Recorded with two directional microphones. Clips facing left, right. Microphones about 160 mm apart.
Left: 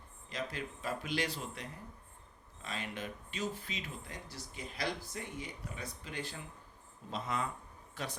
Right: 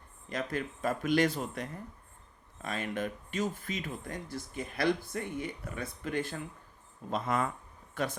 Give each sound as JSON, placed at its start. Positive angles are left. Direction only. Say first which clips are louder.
{"t": 0.3, "sound": "speech", "louder": "right 6 dB", "side_deg": -50}